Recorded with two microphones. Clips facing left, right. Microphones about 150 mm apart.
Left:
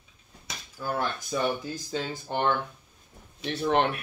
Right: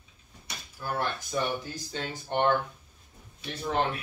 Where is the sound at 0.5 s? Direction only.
90° left.